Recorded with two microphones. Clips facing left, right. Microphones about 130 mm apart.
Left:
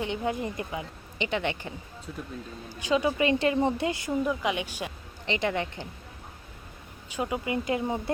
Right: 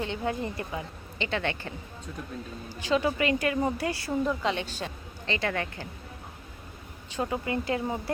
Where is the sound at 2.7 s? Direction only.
15° left (ahead or behind).